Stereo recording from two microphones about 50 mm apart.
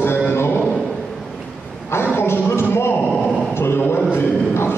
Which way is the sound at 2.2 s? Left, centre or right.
Left.